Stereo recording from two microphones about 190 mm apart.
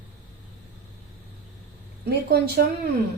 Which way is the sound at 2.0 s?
55° right (ahead or behind).